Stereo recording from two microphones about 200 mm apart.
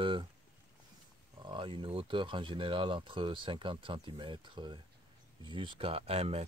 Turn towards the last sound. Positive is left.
turn(degrees=-30)  # may be behind; listen again after turning